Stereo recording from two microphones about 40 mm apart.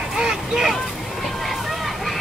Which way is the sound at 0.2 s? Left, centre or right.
Centre.